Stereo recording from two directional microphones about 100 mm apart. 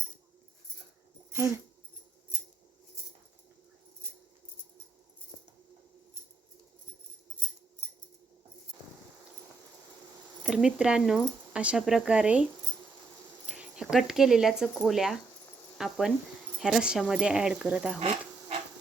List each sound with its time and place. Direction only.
1.3 s speech: 25° right (ahead or behind)
10.4 s speech: 5° right (ahead or behind)
13.5 s speech: 10° right (ahead or behind)